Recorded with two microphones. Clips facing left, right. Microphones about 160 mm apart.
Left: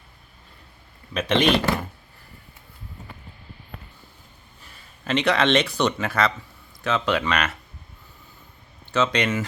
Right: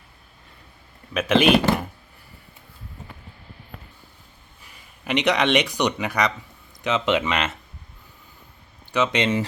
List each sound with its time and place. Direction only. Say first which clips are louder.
1.1 s speech: right 3 dB; 10° right (ahead or behind)
4.6 s speech: even; 15° right (ahead or behind)
8.9 s speech: right 1 dB; 20° right (ahead or behind)